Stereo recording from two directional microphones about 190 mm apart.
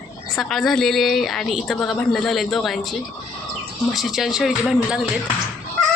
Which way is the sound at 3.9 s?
Centre (ahead or behind).